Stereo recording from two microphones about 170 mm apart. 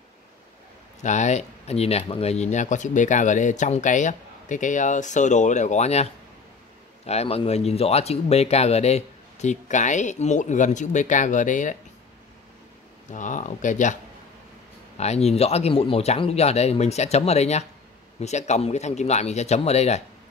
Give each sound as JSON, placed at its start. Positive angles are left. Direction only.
{"t": 1.0, "sound": "speech", "side_deg": 45}
{"t": 7.1, "sound": "speech", "side_deg": 35}
{"t": 13.1, "sound": "speech", "side_deg": 45}
{"t": 15.0, "sound": "speech", "side_deg": 40}